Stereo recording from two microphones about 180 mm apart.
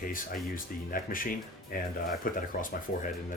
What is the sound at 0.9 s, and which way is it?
Speech, 50° left (ahead or behind).